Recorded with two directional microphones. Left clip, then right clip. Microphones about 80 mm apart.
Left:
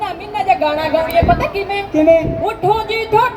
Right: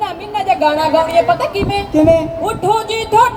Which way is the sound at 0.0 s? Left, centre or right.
Right.